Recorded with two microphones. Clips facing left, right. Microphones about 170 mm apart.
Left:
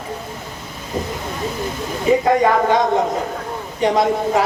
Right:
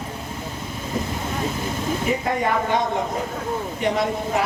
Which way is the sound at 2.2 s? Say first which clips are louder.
Left 7 dB; 90° left.